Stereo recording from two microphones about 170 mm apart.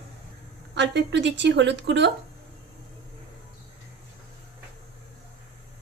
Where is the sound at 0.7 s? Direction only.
90° right.